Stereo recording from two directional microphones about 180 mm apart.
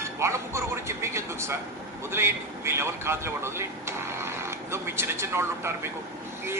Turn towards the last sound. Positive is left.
turn(degrees=-15)  # may be behind; listen again after turning